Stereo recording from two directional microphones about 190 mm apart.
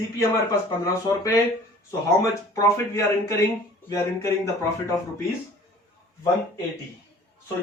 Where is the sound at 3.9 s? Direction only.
15° left (ahead or behind).